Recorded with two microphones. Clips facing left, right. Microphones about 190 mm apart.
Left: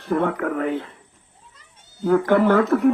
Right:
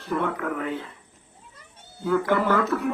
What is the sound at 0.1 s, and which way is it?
Speech, 60° left (ahead or behind).